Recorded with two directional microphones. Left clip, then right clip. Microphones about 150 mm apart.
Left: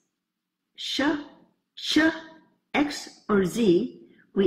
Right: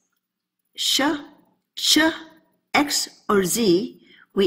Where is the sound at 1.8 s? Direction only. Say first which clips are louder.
Right 4 dB; 10° right (ahead or behind).